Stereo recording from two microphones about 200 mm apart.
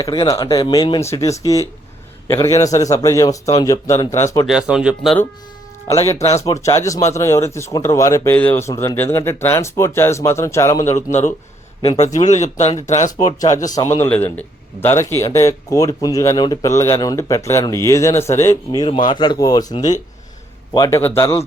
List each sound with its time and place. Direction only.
0.0 s speech: 25° left (ahead or behind)
4.4 s speech: 5° right (ahead or behind)
5.9 s speech: 15° left (ahead or behind)
11.9 s speech: 35° left (ahead or behind)
13.7 s speech: 15° left (ahead or behind)